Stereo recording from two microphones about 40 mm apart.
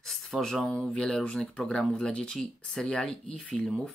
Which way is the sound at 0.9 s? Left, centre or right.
Centre.